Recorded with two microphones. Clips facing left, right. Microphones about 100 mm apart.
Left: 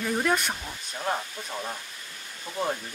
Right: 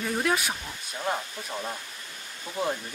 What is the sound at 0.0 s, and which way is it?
Speech, centre (ahead or behind).